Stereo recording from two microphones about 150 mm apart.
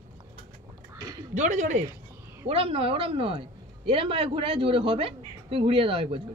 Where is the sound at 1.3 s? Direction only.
55° right (ahead or behind).